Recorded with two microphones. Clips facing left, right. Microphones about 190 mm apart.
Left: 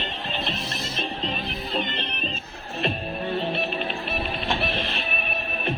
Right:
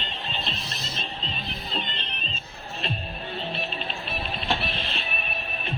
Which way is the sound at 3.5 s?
60° left (ahead or behind).